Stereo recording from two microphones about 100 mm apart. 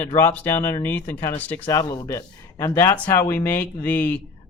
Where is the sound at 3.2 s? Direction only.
20° left (ahead or behind).